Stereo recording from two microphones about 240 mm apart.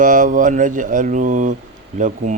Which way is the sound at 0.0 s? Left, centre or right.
Right.